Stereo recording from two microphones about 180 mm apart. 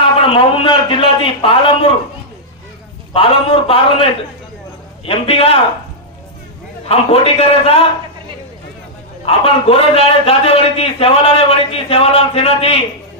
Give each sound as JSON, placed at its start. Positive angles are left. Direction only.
{"t": 0.2, "sound": "a man's voice", "side_deg": 30}
{"t": 3.1, "sound": "a man's voice", "side_deg": 30}
{"t": 6.9, "sound": "a man's voice", "side_deg": 35}
{"t": 9.2, "sound": "a man's voice", "side_deg": 30}